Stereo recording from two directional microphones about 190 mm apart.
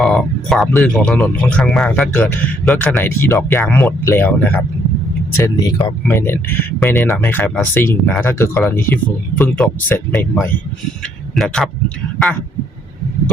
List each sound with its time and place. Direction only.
0.0 s speech: centre (ahead or behind)
5.4 s speech: 20° left (ahead or behind)
11.3 s speech: centre (ahead or behind)